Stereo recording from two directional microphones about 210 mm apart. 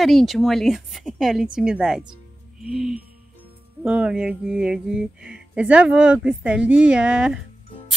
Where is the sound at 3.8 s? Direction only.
5° right (ahead or behind).